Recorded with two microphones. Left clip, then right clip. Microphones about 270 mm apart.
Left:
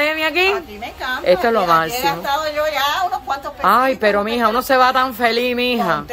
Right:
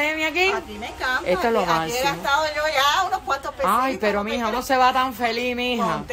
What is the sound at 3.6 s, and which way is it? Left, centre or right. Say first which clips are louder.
A woman's voice: left 8 dB; centre.